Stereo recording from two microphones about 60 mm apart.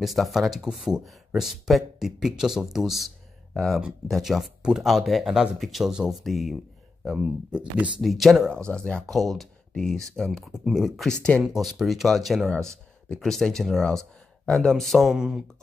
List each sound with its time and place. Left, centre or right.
0.0 s speech: centre
7.5 s speech: right
8.0 s speech: centre
8.6 s speech: centre
9.0 s speech: centre
12.5 s speech: centre
15.1 s speech: centre